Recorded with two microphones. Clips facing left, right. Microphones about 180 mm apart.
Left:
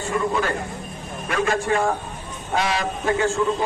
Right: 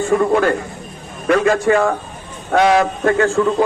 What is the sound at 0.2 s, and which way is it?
Speech, 60° right (ahead or behind).